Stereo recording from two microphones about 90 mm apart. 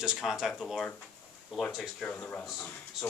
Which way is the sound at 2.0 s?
15° left (ahead or behind).